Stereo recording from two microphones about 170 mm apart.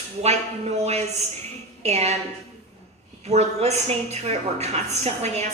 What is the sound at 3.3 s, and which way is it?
A woman's voice, 40° right (ahead or behind).